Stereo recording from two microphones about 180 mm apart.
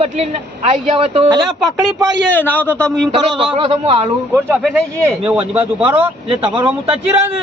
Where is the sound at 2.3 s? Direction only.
10° left (ahead or behind).